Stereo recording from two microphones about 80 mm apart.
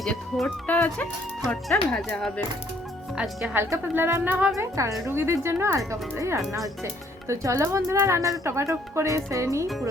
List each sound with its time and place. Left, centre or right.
0.0 s speech: centre
0.7 s speech: centre
1.7 s speech: centre
3.6 s speech: right
4.5 s a woman's voice: right